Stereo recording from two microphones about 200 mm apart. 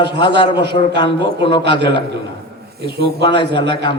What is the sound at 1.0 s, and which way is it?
Speech, 25° left (ahead or behind).